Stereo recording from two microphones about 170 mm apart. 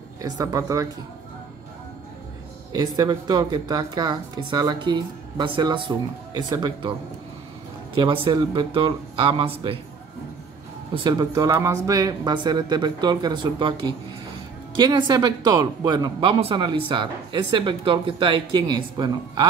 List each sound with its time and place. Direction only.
0.2 s speech: 20° right (ahead or behind)
2.7 s speech: 25° right (ahead or behind)
7.9 s speech: 30° right (ahead or behind)
11.1 s speech: 20° right (ahead or behind)